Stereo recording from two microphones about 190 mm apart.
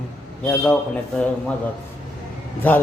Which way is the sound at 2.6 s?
10° left (ahead or behind).